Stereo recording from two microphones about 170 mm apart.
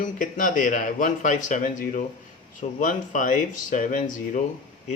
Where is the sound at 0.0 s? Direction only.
50° left (ahead or behind).